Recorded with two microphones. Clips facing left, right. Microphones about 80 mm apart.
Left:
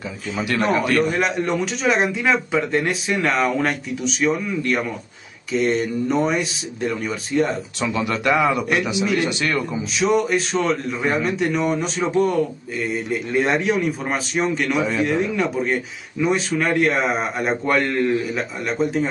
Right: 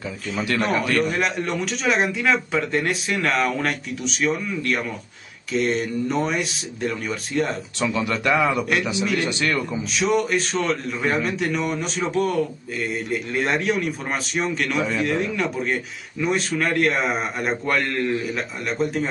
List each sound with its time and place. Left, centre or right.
0.6 s a man's voice: centre
8.2 s a man's voice: centre
8.5 s a man's voice: centre